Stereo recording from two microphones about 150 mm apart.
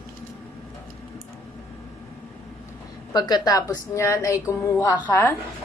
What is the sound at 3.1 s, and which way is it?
A woman's voice, 30° left (ahead or behind).